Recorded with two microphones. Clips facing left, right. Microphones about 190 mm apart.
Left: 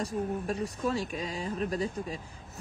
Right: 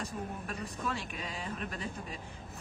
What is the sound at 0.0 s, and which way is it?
Speech, 35° left (ahead or behind).